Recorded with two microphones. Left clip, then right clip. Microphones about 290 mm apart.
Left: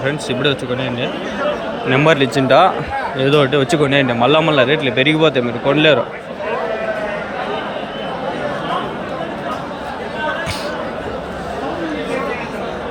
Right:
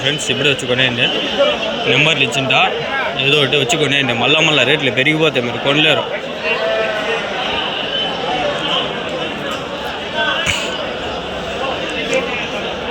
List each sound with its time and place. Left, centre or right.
1.9 s a man's voice: centre
2.1 s speech: left
3.2 s a man's voice: centre